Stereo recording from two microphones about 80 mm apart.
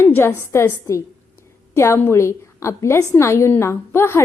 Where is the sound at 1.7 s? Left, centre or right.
Left.